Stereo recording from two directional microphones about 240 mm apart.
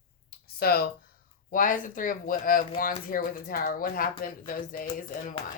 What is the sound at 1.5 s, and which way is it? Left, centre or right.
Speech, left.